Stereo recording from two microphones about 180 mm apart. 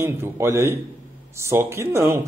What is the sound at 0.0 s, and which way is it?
Speech, 15° right (ahead or behind).